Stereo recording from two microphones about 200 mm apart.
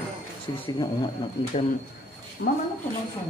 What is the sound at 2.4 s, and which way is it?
Speech, 50° left (ahead or behind).